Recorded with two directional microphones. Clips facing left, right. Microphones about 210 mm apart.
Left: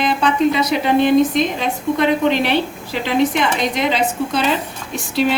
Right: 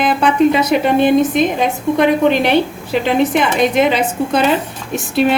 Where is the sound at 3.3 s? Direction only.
55° right (ahead or behind).